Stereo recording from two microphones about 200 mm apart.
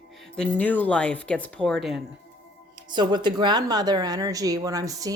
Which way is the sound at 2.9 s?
20° right (ahead or behind).